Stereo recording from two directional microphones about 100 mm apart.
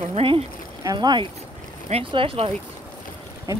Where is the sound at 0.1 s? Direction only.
65° right (ahead or behind).